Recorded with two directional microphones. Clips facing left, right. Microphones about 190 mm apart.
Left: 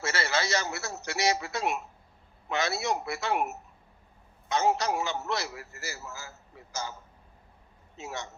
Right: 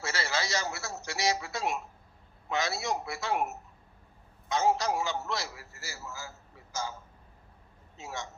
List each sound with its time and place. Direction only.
0.0 s a sound: 65° left (ahead or behind)
2.5 s a man's voice: 65° left (ahead or behind)
7.9 s a man's voice: 65° left (ahead or behind)